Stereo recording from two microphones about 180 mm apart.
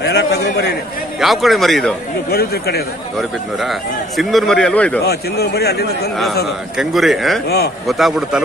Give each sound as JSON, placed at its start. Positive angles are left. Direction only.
{"t": 0.0, "sound": "a man's voice", "side_deg": 70}
{"t": 1.2, "sound": "speech", "side_deg": 0}
{"t": 2.3, "sound": "speech", "side_deg": 60}
{"t": 4.2, "sound": "speech", "side_deg": 0}
{"t": 5.0, "sound": "speech", "side_deg": 65}
{"t": 6.8, "sound": "speech", "side_deg": 0}
{"t": 7.4, "sound": "speech", "side_deg": 65}